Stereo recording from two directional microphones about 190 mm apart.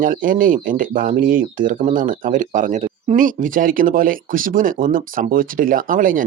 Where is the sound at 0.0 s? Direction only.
45° right (ahead or behind).